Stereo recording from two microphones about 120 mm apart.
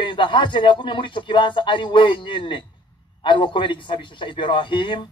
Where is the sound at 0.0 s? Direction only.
45° left (ahead or behind).